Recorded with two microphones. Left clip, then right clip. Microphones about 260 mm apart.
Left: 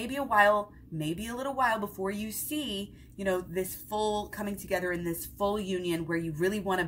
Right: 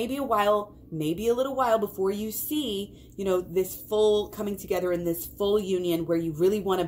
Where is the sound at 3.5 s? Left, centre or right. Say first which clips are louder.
Right 7 dB; left.